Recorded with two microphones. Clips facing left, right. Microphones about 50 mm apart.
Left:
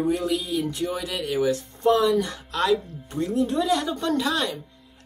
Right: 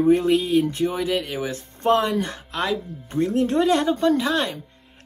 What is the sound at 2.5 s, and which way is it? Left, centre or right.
Speech, right.